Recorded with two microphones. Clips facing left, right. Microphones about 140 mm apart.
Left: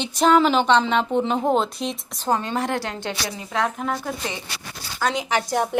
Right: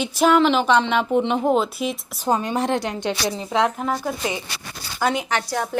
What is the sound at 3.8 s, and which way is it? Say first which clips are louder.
Speech: right 2 dB; 5° right (ahead or behind).